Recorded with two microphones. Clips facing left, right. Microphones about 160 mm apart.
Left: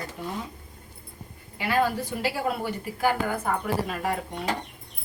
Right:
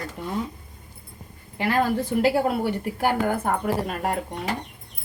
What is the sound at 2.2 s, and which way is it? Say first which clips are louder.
A woman's voice: right 5 dB; 50° right (ahead or behind).